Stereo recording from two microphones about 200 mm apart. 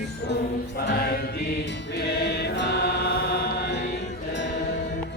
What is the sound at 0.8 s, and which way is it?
Music, 50° left (ahead or behind).